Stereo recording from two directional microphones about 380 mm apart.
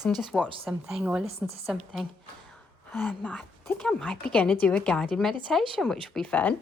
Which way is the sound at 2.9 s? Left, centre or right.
Centre.